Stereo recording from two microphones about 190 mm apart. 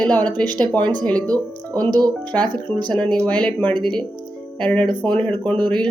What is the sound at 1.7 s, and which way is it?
Speech, 20° right (ahead or behind).